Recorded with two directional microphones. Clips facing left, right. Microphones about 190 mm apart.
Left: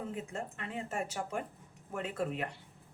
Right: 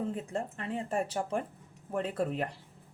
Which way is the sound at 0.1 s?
35° right (ahead or behind).